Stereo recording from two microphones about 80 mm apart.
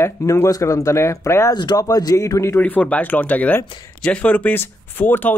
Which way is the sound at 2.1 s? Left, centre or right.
Left.